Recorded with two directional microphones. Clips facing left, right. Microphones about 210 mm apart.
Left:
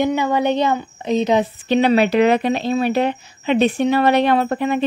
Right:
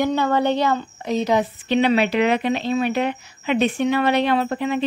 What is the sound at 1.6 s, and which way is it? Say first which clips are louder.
Speech: left 3 dB; 40° left (ahead or behind).